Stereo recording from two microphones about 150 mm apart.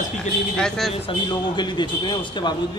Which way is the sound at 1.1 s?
30° left (ahead or behind).